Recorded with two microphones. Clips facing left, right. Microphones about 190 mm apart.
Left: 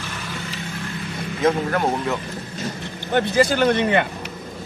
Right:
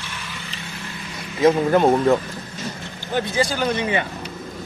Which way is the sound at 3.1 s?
60° left (ahead or behind).